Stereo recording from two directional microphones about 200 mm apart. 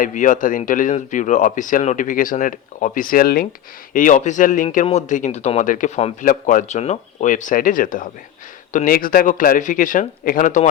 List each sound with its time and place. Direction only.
0.0 s speech: 40° left (ahead or behind)